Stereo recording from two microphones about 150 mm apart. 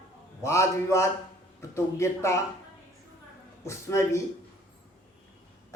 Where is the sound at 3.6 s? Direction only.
20° left (ahead or behind).